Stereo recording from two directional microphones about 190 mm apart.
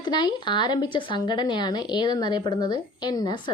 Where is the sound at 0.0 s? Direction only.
25° left (ahead or behind).